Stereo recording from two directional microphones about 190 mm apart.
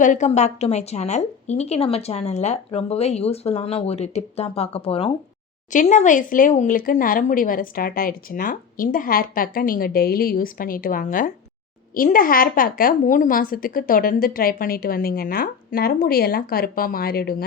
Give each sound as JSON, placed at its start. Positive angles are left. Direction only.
{"t": 0.0, "sound": "a woman's voice", "side_deg": 40}
{"t": 5.7, "sound": "speech", "side_deg": 40}